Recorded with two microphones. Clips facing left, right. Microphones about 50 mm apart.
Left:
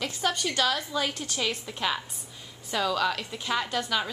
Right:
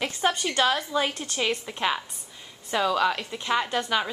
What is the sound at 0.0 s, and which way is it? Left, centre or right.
A woman's voice, right.